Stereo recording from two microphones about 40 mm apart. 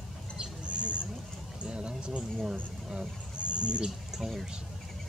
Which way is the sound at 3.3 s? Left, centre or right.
Right.